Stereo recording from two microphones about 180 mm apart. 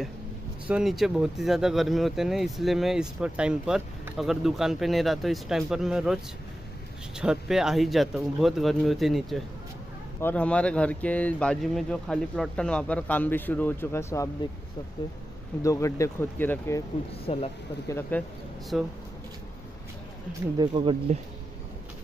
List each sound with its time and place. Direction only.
0.7 s speech: 5° right (ahead or behind)
7.2 s speech: 5° right (ahead or behind); by 14.3 s 15° left (ahead or behind)
15.6 s speech: 15° left (ahead or behind)
17.3 s speech: 30° left (ahead or behind)
17.8 s speech: 15° left (ahead or behind)
18.7 s speech: 5° right (ahead or behind)
20.5 s speech: 25° right (ahead or behind)